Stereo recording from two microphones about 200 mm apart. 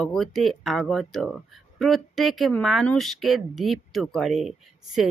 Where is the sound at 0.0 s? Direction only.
Centre (ahead or behind).